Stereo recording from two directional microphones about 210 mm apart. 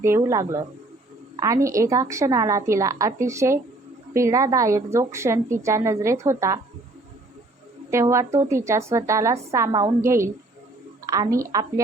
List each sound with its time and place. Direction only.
0.0 s a woman's voice: 15° right (ahead or behind)
7.9 s a woman's voice: 15° right (ahead or behind)